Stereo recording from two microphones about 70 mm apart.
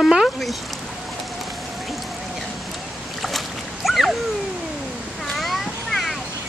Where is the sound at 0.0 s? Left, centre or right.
Centre.